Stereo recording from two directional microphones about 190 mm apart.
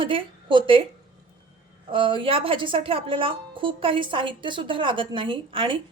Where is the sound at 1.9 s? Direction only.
25° right (ahead or behind).